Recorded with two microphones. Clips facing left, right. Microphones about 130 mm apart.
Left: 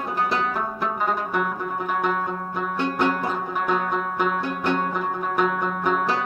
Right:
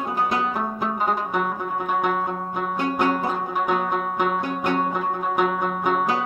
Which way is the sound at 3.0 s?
10° right (ahead or behind).